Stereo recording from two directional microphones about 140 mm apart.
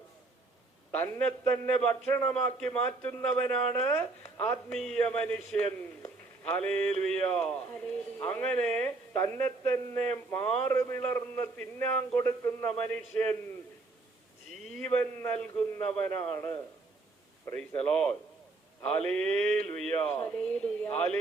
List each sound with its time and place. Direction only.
0.9 s speech: 10° left (ahead or behind)
12.8 s speech: 10° left (ahead or behind)
14.8 s speech: 10° left (ahead or behind)
17.8 s speech: 5° left (ahead or behind)